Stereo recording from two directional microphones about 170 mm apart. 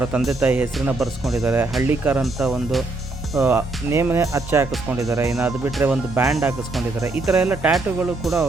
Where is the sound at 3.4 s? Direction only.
15° right (ahead or behind).